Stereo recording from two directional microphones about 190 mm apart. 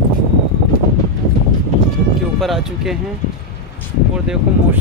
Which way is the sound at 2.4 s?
Centre (ahead or behind).